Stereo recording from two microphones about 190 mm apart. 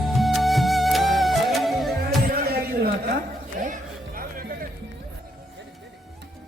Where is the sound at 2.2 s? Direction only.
50° right (ahead or behind).